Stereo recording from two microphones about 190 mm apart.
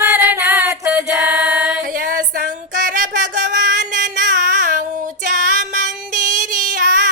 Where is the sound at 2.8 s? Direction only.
45° right (ahead or behind).